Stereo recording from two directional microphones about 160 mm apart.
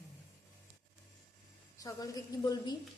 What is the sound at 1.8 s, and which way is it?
Speech, 20° left (ahead or behind).